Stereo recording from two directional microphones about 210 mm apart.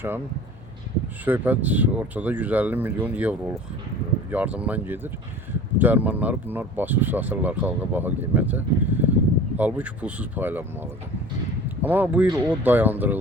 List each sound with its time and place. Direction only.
1.2 s speech: 10° right (ahead or behind)